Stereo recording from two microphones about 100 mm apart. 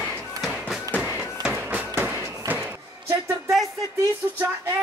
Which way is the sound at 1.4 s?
10° right (ahead or behind).